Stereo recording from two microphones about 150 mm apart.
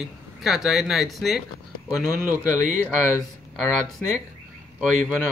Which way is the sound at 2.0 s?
20° left (ahead or behind).